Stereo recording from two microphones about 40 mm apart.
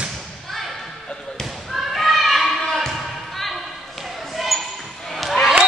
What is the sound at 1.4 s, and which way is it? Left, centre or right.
Thump, centre.